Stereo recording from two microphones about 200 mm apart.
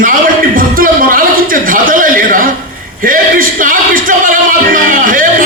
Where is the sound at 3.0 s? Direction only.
45° right (ahead or behind).